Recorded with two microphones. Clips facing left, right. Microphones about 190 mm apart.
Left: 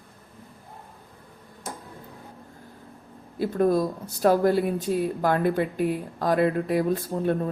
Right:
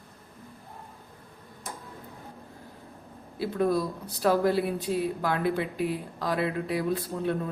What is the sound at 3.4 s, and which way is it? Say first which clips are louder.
Speech: left 4 dB; 45° left (ahead or behind).